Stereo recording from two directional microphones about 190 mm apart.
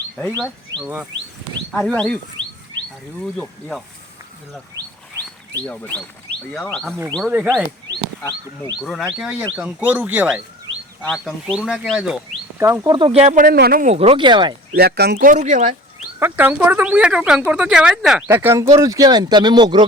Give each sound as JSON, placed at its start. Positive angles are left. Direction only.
{"t": 0.8, "sound": "speech", "side_deg": -10}
{"t": 1.7, "sound": "speech", "side_deg": 5}
{"t": 3.3, "sound": "speech", "side_deg": 0}
{"t": 5.6, "sound": "speech", "side_deg": 10}
{"t": 8.2, "sound": "speech", "side_deg": 20}
{"t": 8.8, "sound": "speech", "side_deg": 0}
{"t": 12.5, "sound": "speech", "side_deg": -15}
{"t": 13.9, "sound": "speech", "side_deg": -30}
{"t": 14.8, "sound": "speech", "side_deg": -55}
{"t": 16.2, "sound": "speech", "side_deg": -10}
{"t": 18.3, "sound": "speech", "side_deg": -15}